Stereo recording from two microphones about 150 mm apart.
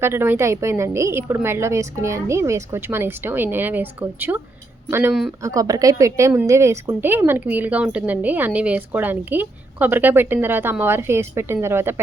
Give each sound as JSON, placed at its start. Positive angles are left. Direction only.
{"t": 0.0, "sound": "a woman's voice", "side_deg": -15}